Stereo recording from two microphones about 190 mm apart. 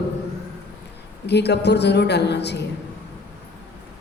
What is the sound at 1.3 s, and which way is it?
A woman's voice, 60° left (ahead or behind).